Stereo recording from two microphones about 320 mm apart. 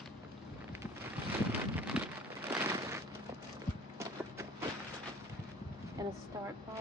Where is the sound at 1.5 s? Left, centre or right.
Centre.